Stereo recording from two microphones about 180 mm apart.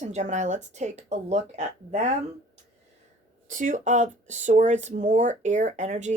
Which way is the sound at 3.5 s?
45° right (ahead or behind).